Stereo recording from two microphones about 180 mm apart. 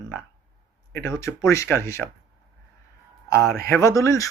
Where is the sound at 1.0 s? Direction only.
15° left (ahead or behind).